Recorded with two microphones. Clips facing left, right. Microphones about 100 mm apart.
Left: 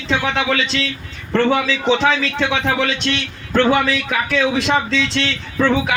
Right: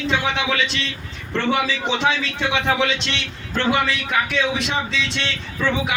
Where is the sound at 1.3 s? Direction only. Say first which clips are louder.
Left 5 dB; 70° left (ahead or behind).